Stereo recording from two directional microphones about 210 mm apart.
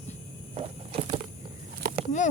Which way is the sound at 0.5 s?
30° right (ahead or behind).